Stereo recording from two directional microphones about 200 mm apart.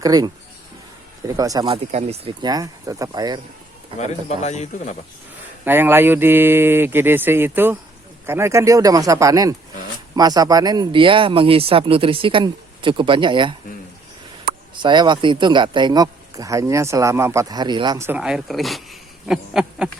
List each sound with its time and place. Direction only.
0.0 s speech: 20° right (ahead or behind)
1.4 s speech: 20° right (ahead or behind)
3.9 s speech: 35° left (ahead or behind)
5.6 s speech: 10° right (ahead or behind)
14.8 s speech: 25° right (ahead or behind); by 18.8 s centre (ahead or behind)
19.2 s a sound: 5° right (ahead or behind)